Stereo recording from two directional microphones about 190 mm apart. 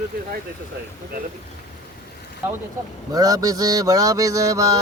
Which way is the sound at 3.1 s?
20° right (ahead or behind).